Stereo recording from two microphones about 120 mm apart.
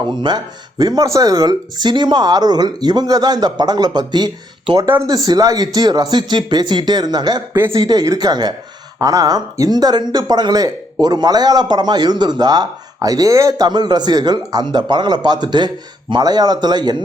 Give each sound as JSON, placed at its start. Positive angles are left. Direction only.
{"t": 0.1, "sound": "speech", "side_deg": -35}
{"t": 4.9, "sound": "speech", "side_deg": -30}